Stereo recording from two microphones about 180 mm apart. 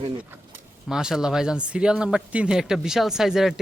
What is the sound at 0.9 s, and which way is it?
Speech, 5° right (ahead or behind).